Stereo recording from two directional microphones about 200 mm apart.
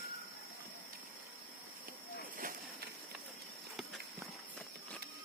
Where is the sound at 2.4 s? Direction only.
45° right (ahead or behind).